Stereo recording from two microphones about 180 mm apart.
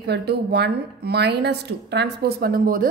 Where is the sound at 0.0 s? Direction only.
65° right (ahead or behind).